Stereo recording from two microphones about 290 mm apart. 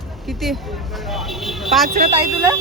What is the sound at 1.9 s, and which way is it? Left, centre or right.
Speech, right.